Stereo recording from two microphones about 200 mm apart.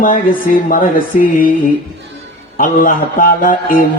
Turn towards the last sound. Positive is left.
turn(degrees=45)  # may be behind; listen again after turning